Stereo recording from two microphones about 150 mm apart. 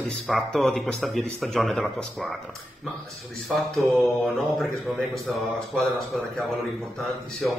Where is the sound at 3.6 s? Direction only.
Centre (ahead or behind).